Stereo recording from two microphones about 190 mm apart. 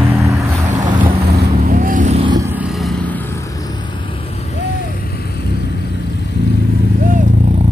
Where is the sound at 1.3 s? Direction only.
50° right (ahead or behind).